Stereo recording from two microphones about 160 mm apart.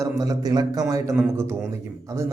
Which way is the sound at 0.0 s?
20° right (ahead or behind).